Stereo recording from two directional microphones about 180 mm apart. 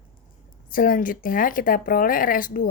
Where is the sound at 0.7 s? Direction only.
50° left (ahead or behind).